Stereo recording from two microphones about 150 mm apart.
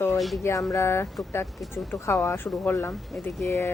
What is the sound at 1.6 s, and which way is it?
Speech, centre (ahead or behind).